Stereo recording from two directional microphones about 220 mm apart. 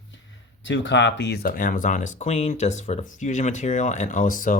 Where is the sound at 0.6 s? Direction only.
55° left (ahead or behind).